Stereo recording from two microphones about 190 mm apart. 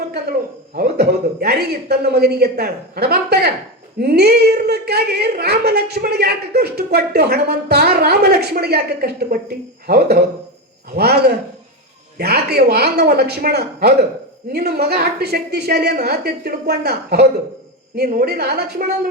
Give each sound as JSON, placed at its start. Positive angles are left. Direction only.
{"t": 0.8, "sound": "a woman's voice", "side_deg": -55}